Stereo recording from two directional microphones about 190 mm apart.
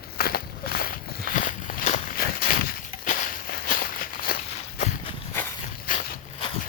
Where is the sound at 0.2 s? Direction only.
50° left (ahead or behind).